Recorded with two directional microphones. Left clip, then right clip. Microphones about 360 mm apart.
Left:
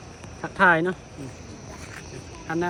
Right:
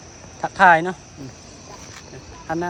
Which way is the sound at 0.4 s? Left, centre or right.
Centre.